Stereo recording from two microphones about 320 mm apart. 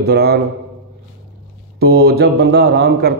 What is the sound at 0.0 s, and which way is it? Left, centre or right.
Speech, right.